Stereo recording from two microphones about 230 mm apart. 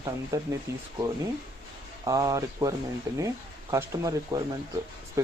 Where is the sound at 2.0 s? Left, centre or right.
Centre.